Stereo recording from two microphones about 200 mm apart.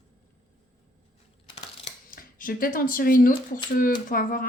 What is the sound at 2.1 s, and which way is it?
A woman's voice, 45° left (ahead or behind).